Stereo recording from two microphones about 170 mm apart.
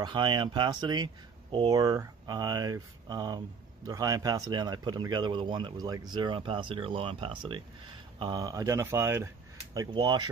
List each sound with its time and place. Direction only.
0.0 s speech: 25° right (ahead or behind)
9.8 s speech: 25° right (ahead or behind)